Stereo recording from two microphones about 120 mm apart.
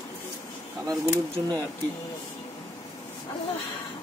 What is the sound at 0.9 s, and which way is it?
Speech, 30° right (ahead or behind).